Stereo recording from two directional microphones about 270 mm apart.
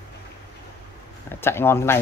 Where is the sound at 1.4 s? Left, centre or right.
Centre.